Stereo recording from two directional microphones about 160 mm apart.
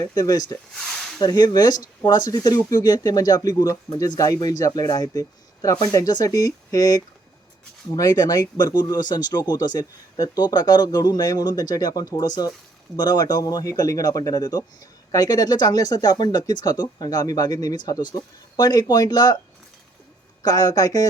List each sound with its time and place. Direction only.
0.0 s speech: 25° left (ahead or behind)
20.4 s speech: 25° left (ahead or behind)